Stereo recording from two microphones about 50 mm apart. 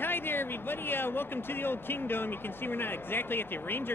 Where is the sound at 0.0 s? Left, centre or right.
Left.